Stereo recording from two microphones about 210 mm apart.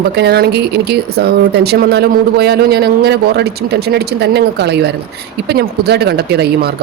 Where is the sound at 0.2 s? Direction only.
50° right (ahead or behind).